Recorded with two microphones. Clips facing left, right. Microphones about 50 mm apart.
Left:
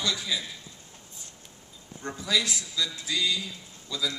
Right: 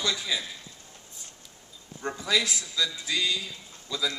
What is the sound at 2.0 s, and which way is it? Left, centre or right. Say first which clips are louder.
Speech: right 3 dB; centre.